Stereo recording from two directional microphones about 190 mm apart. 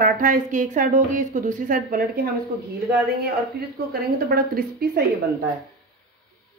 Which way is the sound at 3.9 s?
55° right (ahead or behind).